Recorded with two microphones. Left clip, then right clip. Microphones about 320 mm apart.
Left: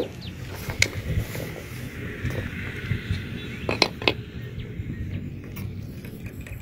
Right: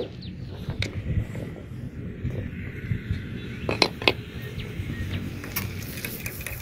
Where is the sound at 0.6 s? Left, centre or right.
Left.